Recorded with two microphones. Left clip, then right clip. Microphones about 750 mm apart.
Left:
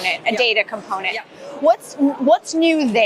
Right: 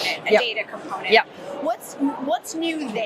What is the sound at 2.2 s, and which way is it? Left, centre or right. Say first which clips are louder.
Speech: left 13 dB; left.